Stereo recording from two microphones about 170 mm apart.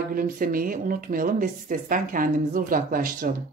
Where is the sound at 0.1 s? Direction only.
55° right (ahead or behind).